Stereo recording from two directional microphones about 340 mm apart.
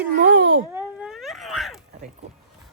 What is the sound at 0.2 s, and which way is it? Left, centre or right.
Babbling, right.